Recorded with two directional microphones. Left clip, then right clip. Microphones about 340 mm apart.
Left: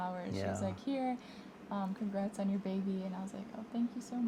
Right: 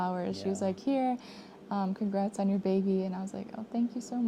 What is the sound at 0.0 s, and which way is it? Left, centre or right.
A woman's voice, right.